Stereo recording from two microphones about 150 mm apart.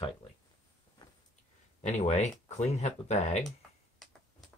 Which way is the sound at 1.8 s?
50° left (ahead or behind).